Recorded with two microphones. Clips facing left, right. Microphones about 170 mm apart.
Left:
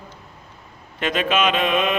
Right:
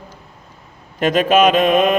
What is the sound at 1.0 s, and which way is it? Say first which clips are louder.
Mantra: right 7 dB; 40° right (ahead or behind).